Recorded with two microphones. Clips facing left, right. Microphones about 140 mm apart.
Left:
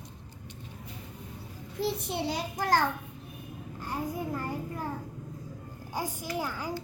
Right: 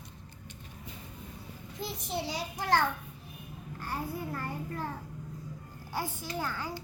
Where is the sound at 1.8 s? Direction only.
55° left (ahead or behind).